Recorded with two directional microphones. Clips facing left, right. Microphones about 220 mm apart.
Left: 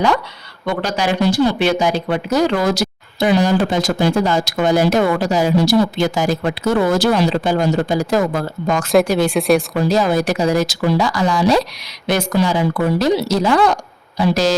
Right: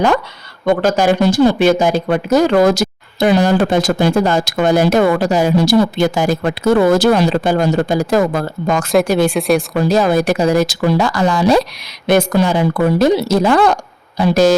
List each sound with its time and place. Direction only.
0.6 s speech: 45° right (ahead or behind)
9.3 s speech: centre (ahead or behind)
9.9 s speech: 55° right (ahead or behind)